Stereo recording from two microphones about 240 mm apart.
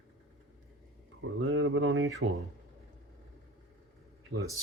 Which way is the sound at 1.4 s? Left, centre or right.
Right.